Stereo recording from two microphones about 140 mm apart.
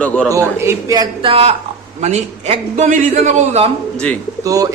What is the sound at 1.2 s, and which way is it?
A man's voice, 45° right (ahead or behind).